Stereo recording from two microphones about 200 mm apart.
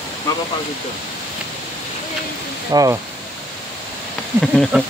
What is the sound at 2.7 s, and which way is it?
Speech, 20° right (ahead or behind).